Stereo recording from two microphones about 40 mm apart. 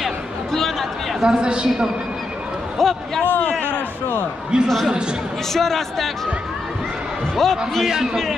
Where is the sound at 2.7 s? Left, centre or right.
Centre.